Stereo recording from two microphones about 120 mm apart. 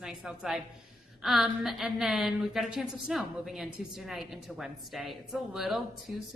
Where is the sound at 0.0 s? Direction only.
Centre (ahead or behind).